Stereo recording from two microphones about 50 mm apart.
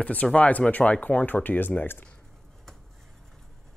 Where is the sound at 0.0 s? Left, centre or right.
Left.